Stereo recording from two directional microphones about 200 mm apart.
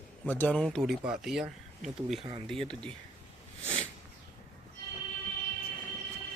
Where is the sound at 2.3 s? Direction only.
25° right (ahead or behind).